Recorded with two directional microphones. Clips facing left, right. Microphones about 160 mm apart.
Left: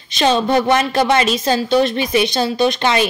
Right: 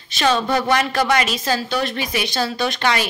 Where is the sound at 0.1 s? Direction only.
25° left (ahead or behind).